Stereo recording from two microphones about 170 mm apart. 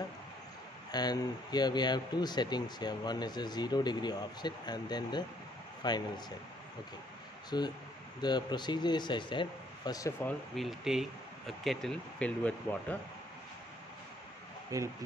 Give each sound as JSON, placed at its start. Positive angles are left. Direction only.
{"t": 0.9, "sound": "speech", "side_deg": 25}
{"t": 7.5, "sound": "speech", "side_deg": 25}
{"t": 10.2, "sound": "speech", "side_deg": 0}
{"t": 14.7, "sound": "speech", "side_deg": -20}